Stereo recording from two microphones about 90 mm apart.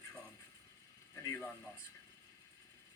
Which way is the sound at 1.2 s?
25° left (ahead or behind).